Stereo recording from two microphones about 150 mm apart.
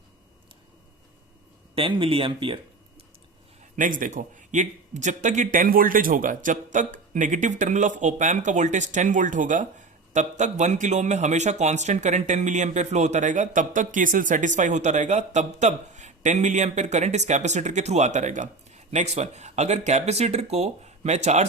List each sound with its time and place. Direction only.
1.7 s speech: 35° right (ahead or behind)
3.8 s a man's voice: 60° right (ahead or behind)